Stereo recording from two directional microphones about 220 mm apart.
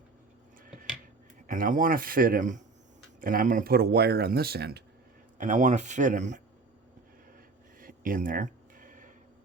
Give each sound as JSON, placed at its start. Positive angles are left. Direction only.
{"t": 1.5, "sound": "speech", "side_deg": -40}
{"t": 5.4, "sound": "speech", "side_deg": -35}
{"t": 7.8, "sound": "a sound", "side_deg": -40}